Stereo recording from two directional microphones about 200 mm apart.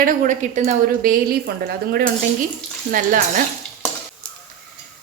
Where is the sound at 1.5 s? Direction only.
55° right (ahead or behind).